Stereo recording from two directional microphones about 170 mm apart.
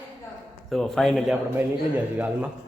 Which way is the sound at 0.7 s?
Centre (ahead or behind).